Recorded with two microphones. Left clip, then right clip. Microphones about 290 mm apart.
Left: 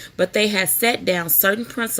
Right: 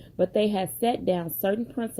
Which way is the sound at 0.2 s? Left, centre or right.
Left.